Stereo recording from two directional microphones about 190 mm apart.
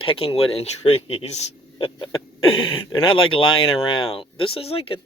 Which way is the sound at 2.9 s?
25° left (ahead or behind).